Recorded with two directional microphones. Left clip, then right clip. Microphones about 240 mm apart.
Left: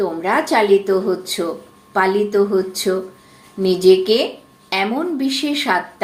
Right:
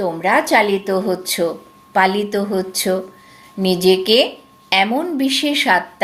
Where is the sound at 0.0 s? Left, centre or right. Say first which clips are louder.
Right 2 dB; right.